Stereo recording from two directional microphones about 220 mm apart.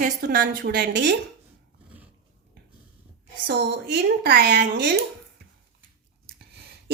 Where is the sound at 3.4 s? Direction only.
50° right (ahead or behind).